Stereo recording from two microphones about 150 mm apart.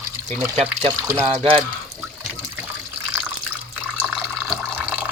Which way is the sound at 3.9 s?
10° right (ahead or behind).